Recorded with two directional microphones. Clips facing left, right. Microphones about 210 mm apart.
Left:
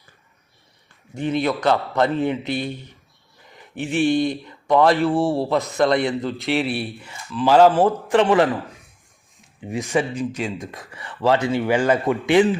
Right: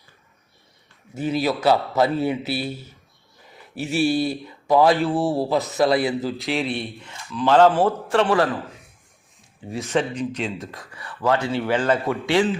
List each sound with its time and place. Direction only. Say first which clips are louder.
1.1 s a man's voice: left 1 dB; 5° right (ahead or behind)
3.9 s speech: left 2 dB; 5° right (ahead or behind); by 8.4 s 20° left (ahead or behind)
9.6 s speech: left 1 dB; 15° left (ahead or behind)